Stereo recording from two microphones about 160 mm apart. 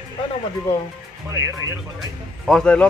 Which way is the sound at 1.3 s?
20° right (ahead or behind).